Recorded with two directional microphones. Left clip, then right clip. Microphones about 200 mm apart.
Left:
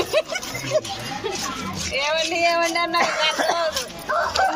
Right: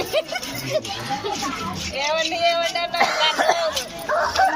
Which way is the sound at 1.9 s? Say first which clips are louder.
Left 1 dB; 45° left (ahead or behind).